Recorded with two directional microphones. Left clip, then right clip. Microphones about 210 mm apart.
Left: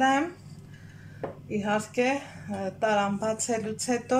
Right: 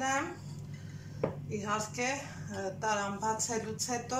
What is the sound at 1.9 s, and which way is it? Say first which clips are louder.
A woman's voice: left 8 dB; 40° left (ahead or behind).